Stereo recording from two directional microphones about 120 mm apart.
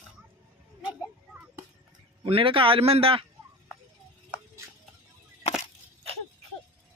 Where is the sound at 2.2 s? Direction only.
50° right (ahead or behind).